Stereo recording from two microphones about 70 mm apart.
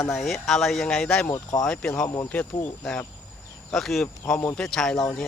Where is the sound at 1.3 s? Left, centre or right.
Left.